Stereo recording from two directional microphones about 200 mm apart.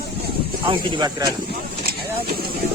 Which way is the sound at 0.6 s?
20° right (ahead or behind).